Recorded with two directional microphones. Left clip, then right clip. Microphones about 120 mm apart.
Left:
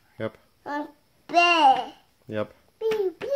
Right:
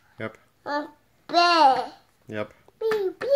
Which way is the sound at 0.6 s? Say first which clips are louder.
Right 3 dB; 10° left (ahead or behind).